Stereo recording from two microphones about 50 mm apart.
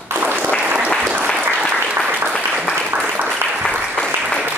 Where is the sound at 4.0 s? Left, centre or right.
Centre.